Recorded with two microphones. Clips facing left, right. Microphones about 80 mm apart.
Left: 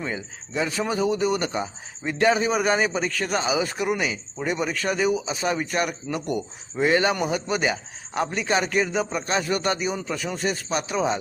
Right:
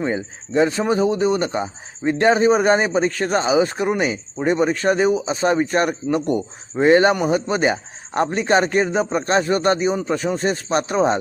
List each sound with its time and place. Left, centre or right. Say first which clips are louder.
0.0 s speech: right 8 dB; right